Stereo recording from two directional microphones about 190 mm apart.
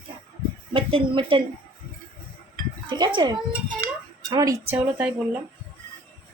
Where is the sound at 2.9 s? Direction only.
25° right (ahead or behind).